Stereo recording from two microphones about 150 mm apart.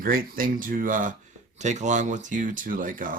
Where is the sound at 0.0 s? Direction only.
70° right (ahead or behind).